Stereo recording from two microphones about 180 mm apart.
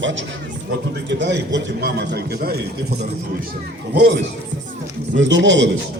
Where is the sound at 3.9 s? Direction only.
70° right (ahead or behind).